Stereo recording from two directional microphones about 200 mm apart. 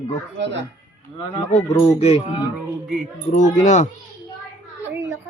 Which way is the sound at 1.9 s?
35° left (ahead or behind).